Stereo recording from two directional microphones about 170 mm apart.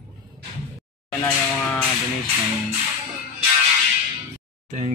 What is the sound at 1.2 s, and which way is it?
Music, 5° left (ahead or behind).